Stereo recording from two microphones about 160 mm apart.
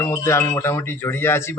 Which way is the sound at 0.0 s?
20° left (ahead or behind).